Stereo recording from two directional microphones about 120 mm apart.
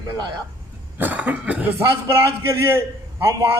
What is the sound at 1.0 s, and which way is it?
A man's voice, 15° right (ahead or behind).